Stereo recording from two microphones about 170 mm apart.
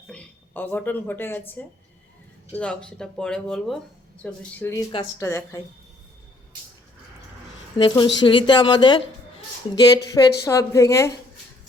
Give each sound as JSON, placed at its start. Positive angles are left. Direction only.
{"t": 0.1, "sound": "a woman's voice", "side_deg": 10}
{"t": 7.9, "sound": "a woman's voice", "side_deg": 25}